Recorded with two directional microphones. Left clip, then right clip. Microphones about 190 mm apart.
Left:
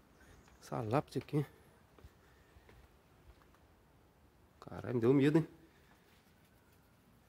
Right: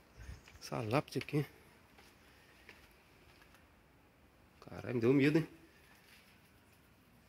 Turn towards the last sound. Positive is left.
turn(degrees=15)  # may be behind; listen again after turning